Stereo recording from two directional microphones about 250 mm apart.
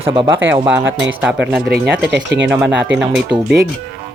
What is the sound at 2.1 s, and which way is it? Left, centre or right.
Speech, right.